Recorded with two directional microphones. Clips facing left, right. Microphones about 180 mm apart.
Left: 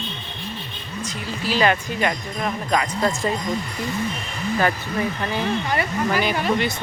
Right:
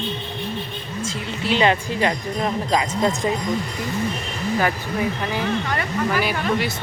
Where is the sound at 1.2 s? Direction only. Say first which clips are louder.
Right 1 dB; 25° right (ahead or behind).